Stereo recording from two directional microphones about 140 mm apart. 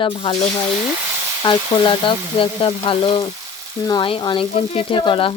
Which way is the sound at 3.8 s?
30° left (ahead or behind).